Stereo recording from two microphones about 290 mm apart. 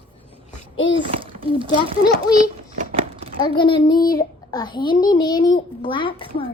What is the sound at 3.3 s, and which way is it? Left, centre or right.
A child's voice, centre.